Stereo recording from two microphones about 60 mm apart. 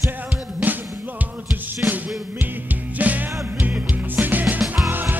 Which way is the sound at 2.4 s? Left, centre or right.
Right.